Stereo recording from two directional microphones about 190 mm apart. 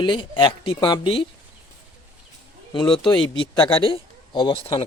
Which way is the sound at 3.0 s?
25° left (ahead or behind).